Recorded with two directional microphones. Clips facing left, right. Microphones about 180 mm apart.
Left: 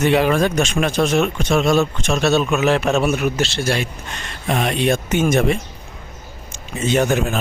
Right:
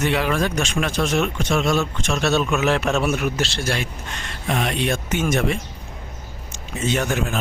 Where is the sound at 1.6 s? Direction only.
35° left (ahead or behind).